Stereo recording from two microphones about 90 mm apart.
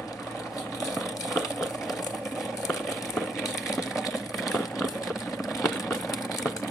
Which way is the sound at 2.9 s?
Centre (ahead or behind).